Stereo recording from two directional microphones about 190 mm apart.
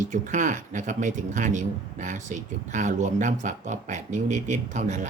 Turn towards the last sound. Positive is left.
turn(degrees=-40)  # may be behind; listen again after turning